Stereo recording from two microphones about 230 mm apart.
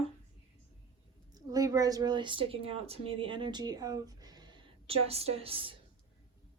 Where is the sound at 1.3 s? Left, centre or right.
Centre.